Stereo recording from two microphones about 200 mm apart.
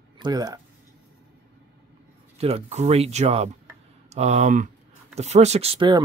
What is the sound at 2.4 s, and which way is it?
Speech, 30° right (ahead or behind).